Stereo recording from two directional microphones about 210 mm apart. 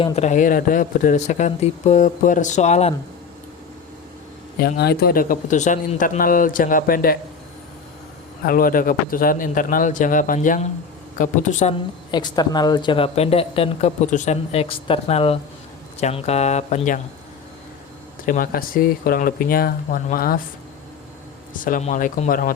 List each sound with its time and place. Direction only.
0.0 s speech: 35° left (ahead or behind)
4.6 s speech: 50° left (ahead or behind)
8.4 s speech: 45° left (ahead or behind)
12.1 s speech: 20° left (ahead or behind)
18.3 s speech: 40° left (ahead or behind)
21.6 s speech: 35° left (ahead or behind)